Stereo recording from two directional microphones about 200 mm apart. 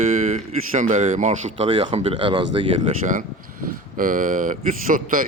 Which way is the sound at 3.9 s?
45° right (ahead or behind).